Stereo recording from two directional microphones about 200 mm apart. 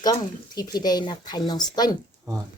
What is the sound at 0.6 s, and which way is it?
A woman's voice, 20° left (ahead or behind).